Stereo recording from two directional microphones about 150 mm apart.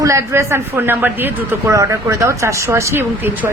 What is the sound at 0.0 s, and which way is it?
Speech, 20° right (ahead or behind).